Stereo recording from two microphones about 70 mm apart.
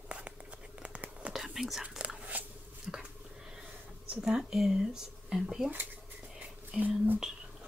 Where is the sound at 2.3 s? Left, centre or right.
Right.